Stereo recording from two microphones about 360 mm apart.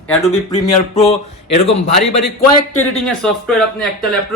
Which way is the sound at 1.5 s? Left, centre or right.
Centre.